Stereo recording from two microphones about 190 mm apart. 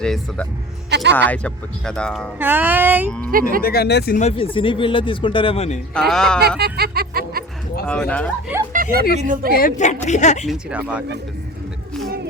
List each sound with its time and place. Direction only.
0.0 s speech: 5° left (ahead or behind)
0.9 s speech: 65° right (ahead or behind)
1.3 s speech: 5° left (ahead or behind)
2.4 s music: 10° right (ahead or behind)
3.6 s speech: 55° left (ahead or behind)
4.2 s speech: 30° left (ahead or behind)
5.9 s speech: 5° left (ahead or behind)
6.6 s music: 55° right (ahead or behind)
7.9 s speech: 5° left (ahead or behind)
8.7 s a sound: 50° right (ahead or behind)
9.1 s speech: 45° right (ahead or behind)
9.5 s a woman's voice: 50° left (ahead or behind)
10.4 s speech: 5° right (ahead or behind)